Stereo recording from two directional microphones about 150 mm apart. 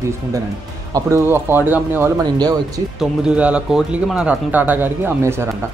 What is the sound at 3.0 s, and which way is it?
Speech, 5° right (ahead or behind).